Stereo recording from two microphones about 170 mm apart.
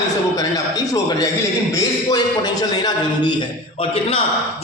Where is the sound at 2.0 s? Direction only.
25° left (ahead or behind).